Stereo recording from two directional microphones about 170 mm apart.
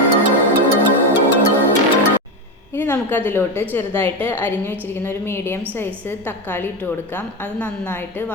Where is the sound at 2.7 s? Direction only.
10° left (ahead or behind).